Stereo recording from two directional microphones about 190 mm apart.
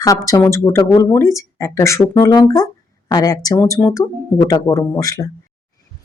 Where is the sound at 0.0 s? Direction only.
20° left (ahead or behind).